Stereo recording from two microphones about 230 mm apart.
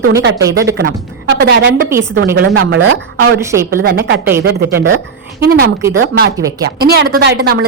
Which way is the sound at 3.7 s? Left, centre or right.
Right.